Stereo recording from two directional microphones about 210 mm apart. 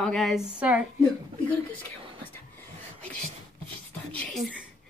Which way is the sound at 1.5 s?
5° left (ahead or behind).